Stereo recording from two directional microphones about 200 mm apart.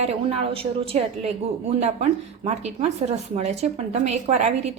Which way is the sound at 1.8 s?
35° right (ahead or behind).